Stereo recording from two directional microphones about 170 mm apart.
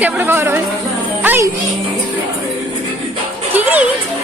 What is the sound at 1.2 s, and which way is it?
Music, 15° right (ahead or behind).